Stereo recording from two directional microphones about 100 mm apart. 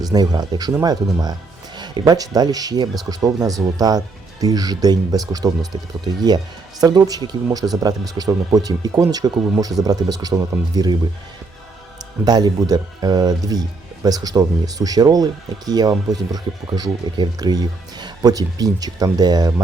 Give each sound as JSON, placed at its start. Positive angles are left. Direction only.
{"t": 0.1, "sound": "a man's voice", "side_deg": -40}
{"t": 12.2, "sound": "a man's voice", "side_deg": -40}